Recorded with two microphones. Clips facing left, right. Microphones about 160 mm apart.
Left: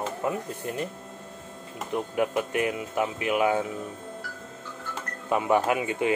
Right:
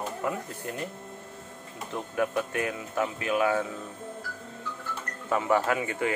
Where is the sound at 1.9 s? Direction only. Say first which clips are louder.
Left 2 dB; 20° left (ahead or behind).